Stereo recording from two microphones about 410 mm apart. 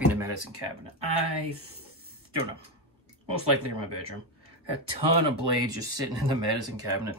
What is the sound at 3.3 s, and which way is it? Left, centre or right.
Speech, right.